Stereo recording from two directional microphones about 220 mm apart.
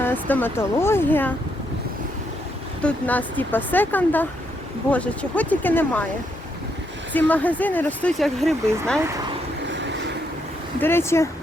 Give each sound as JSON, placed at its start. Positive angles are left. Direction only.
{"t": 0.0, "sound": "speech", "side_deg": 10}
{"t": 2.8, "sound": "speech", "side_deg": 5}
{"t": 7.1, "sound": "speech", "side_deg": 5}
{"t": 9.7, "sound": "vehicle", "side_deg": -55}
{"t": 10.8, "sound": "speech", "side_deg": 10}